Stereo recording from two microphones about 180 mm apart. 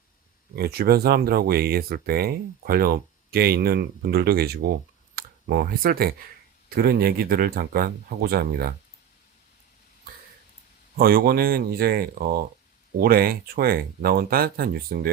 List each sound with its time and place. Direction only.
0.5 s speech: 60° right (ahead or behind)
10.9 s speech: 55° right (ahead or behind)